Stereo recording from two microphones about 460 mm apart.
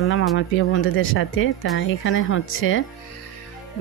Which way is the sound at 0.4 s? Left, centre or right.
Left.